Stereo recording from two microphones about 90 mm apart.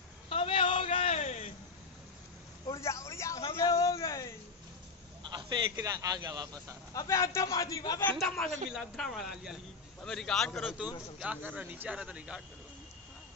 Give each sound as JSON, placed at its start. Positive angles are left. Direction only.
{"t": 0.3, "sound": "a sound", "side_deg": 85}
{"t": 2.8, "sound": "vehicle", "side_deg": 30}
{"t": 3.5, "sound": "a sound", "side_deg": 40}
{"t": 5.2, "sound": "a man's voice", "side_deg": -60}
{"t": 6.9, "sound": "a man's voice", "side_deg": 40}
{"t": 8.2, "sound": "a man's voice", "side_deg": 0}
{"t": 11.2, "sound": "speech", "side_deg": -15}